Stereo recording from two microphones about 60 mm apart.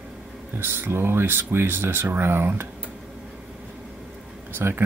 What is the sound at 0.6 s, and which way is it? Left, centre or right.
Speech, right.